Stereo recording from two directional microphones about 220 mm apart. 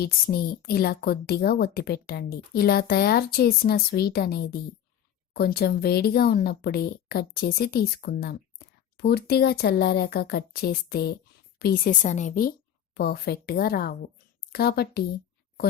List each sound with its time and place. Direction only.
0.0 s a woman's voice: 45° left (ahead or behind)